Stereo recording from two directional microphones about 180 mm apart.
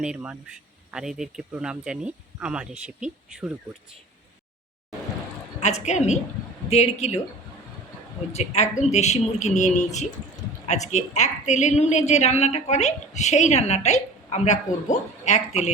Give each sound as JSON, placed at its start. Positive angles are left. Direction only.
{"t": 0.0, "sound": "speech", "side_deg": -5}
{"t": 5.5, "sound": "a woman's voice", "side_deg": 40}
{"t": 8.3, "sound": "a woman's voice", "side_deg": 40}